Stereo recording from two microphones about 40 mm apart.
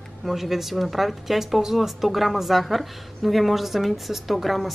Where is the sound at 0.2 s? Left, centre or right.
Centre.